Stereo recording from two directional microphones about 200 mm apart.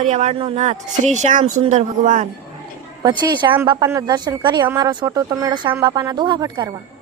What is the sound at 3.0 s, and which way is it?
A woman's voice, 20° right (ahead or behind).